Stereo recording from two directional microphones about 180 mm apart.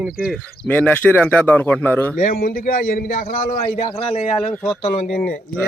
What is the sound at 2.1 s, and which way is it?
A man's voice, 50° left (ahead or behind).